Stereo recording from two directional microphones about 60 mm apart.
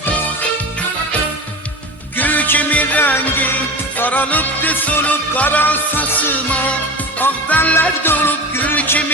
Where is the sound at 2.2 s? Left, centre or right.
Left.